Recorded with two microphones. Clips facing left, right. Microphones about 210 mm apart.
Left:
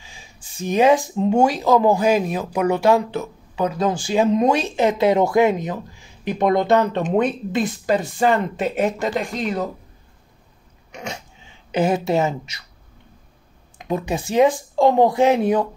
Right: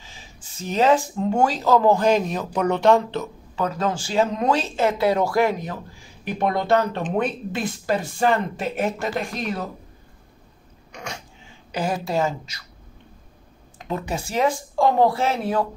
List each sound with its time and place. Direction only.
0.0 s speech: 15° left (ahead or behind)
10.9 s a sound: 20° left (ahead or behind)
11.7 s a woman's voice: 20° left (ahead or behind)
13.8 s speech: 15° left (ahead or behind)